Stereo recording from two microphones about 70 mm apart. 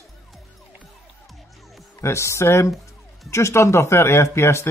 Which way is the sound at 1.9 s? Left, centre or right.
Left.